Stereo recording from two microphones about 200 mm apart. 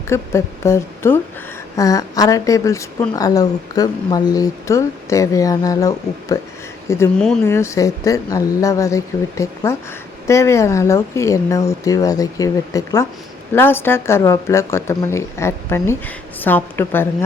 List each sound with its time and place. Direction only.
0.1 s a woman's voice: 15° left (ahead or behind)
7.2 s speech: 5° left (ahead or behind)
7.5 s a woman's voice: 15° left (ahead or behind)